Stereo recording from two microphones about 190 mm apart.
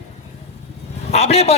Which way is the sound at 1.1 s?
35° left (ahead or behind).